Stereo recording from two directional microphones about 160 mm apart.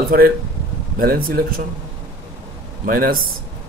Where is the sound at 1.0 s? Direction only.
65° right (ahead or behind).